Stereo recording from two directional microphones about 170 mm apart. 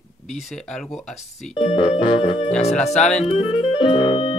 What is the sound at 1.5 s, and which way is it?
Speech, 30° left (ahead or behind).